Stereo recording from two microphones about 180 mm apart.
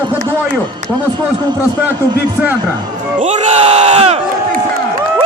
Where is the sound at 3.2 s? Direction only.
40° right (ahead or behind).